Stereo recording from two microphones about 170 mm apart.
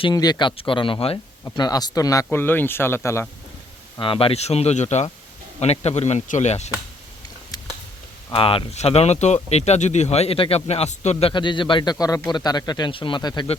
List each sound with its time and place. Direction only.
0.0 s speech: 25° left (ahead or behind)
3.9 s speech: 30° left (ahead or behind)
7.5 s a sound: 20° left (ahead or behind)
8.3 s speech: 30° left (ahead or behind)